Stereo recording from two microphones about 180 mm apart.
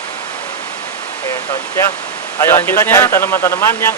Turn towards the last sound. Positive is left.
turn(degrees=15)  # may be behind; listen again after turning